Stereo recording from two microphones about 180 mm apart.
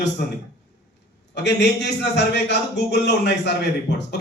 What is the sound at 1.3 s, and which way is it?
A man's voice, 70° left (ahead or behind).